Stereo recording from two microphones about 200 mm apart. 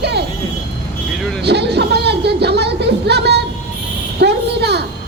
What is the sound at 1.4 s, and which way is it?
Speech, 55° right (ahead or behind).